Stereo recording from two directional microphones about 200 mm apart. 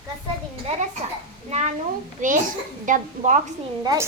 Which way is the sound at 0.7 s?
35° right (ahead or behind).